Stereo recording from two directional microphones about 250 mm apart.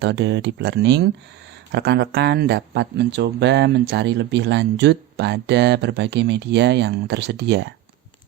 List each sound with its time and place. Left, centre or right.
0.0 s speech: right